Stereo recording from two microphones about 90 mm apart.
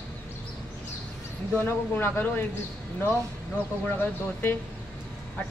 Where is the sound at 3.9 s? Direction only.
25° left (ahead or behind).